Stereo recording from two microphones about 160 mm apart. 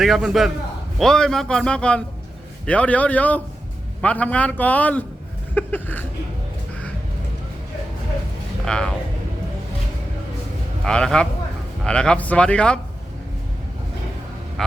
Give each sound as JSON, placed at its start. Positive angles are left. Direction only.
{"t": 0.0, "sound": "a man's voice", "side_deg": 0}
{"t": 8.6, "sound": "a man's voice", "side_deg": 5}
{"t": 10.8, "sound": "a man's voice", "side_deg": 5}